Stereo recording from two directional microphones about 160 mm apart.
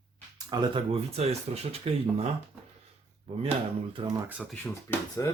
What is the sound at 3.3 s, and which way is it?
Speech, 35° right (ahead or behind).